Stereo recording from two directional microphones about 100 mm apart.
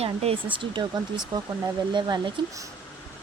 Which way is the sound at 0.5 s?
55° right (ahead or behind).